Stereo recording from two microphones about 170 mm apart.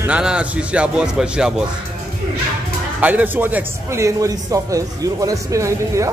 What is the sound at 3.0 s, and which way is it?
A man's voice, 10° right (ahead or behind).